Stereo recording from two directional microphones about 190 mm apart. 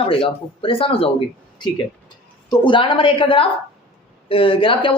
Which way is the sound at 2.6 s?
25° left (ahead or behind).